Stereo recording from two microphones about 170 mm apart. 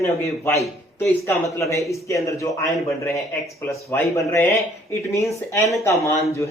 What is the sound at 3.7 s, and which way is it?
Speech, 15° left (ahead or behind).